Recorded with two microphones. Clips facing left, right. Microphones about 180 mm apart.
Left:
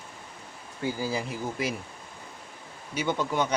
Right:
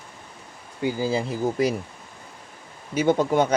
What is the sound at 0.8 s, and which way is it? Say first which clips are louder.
Speech: right 6 dB; 25° right (ahead or behind).